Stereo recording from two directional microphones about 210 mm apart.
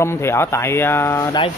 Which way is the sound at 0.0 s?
10° left (ahead or behind).